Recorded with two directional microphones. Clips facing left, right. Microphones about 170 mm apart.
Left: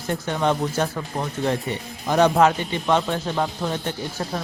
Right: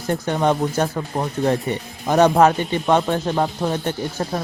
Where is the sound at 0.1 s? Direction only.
45° right (ahead or behind).